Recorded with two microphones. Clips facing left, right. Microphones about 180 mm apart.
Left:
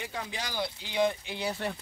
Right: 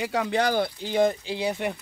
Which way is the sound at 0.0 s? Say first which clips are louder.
Right 13 dB; 85° right.